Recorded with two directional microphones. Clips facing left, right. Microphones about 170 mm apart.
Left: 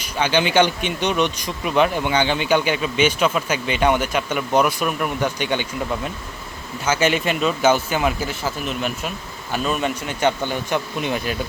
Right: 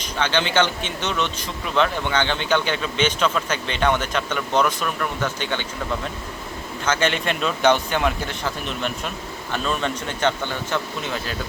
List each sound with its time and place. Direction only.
0.0 s speech: 10° left (ahead or behind)
6.8 s speech: 10° left (ahead or behind)